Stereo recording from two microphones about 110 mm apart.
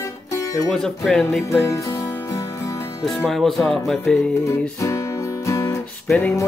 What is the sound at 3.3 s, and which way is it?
Speech, centre (ahead or behind).